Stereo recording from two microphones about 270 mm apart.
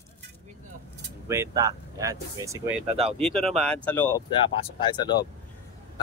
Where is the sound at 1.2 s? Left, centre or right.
Centre.